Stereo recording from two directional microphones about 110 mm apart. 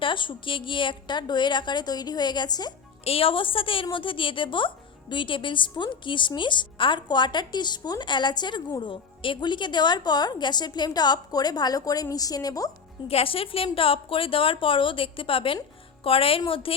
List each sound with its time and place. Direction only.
0.0 s a woman's voice: 50° left (ahead or behind)
3.0 s a woman's voice: 60° left (ahead or behind); by 12.7 s 35° left (ahead or behind)
13.1 s a woman's voice: 60° left (ahead or behind)